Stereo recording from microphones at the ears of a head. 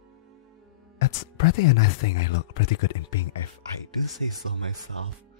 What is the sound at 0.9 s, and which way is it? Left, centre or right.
Speech, left.